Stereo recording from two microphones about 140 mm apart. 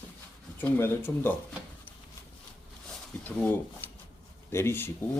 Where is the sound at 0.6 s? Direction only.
15° left (ahead or behind).